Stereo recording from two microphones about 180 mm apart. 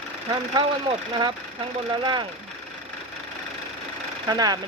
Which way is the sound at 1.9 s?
25° right (ahead or behind).